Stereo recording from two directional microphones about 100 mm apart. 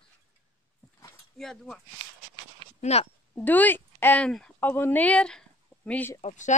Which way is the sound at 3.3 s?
20° left (ahead or behind).